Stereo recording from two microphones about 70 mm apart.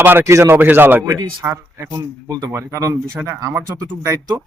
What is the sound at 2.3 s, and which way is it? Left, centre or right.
Speech, right.